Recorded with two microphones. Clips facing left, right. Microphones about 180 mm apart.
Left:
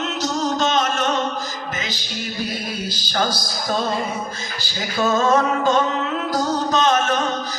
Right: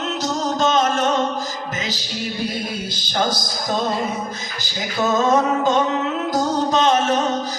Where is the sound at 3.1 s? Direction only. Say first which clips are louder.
Right 1 dB; 20° right (ahead or behind).